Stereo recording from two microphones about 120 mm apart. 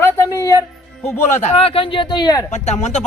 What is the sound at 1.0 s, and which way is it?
Speech, 65° left (ahead or behind).